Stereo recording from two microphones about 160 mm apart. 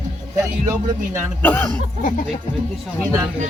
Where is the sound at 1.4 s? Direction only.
15° left (ahead or behind).